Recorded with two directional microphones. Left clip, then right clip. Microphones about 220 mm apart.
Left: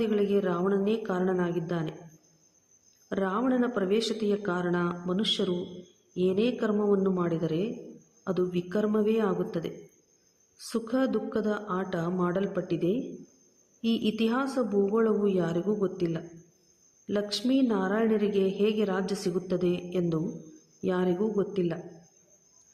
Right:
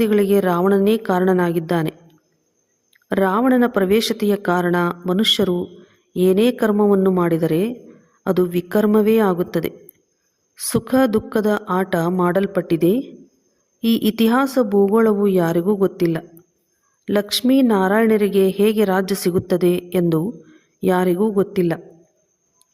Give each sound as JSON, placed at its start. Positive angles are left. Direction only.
{"t": 0.0, "sound": "a woman's voice", "side_deg": -40}
{"t": 3.1, "sound": "a woman's voice", "side_deg": -40}